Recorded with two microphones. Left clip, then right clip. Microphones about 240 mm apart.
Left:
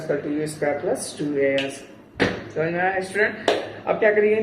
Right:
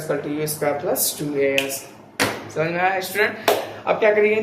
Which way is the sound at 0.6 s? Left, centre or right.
Centre.